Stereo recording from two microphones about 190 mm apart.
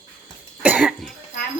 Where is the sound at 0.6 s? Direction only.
5° right (ahead or behind).